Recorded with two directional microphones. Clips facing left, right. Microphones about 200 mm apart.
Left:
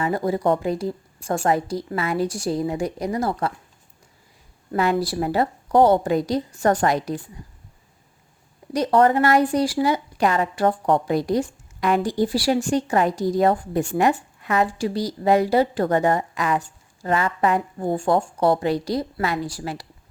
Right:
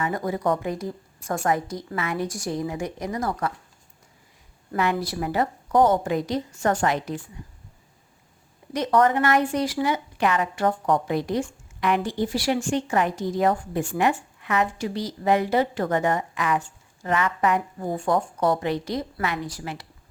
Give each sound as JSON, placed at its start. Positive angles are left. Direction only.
{"t": 0.0, "sound": "a woman's voice", "side_deg": 30}
{"t": 4.7, "sound": "a woman's voice", "side_deg": 35}
{"t": 8.7, "sound": "a woman's voice", "side_deg": 30}